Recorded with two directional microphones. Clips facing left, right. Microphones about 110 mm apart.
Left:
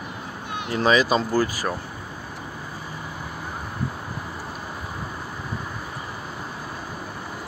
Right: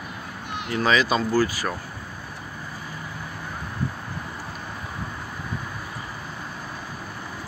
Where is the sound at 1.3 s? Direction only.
15° left (ahead or behind).